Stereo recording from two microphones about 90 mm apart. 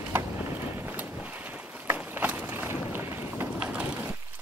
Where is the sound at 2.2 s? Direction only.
15° right (ahead or behind).